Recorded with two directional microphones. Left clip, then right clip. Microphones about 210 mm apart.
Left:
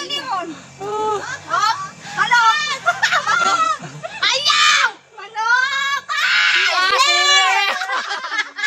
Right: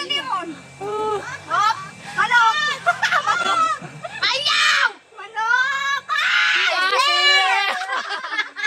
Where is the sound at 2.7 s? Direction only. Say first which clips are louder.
Left 2 dB; 10° right (ahead or behind).